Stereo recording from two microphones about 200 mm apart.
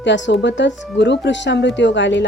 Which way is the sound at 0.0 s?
65° left (ahead or behind).